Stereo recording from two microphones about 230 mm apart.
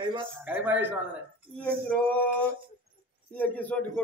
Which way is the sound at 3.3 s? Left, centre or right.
Centre.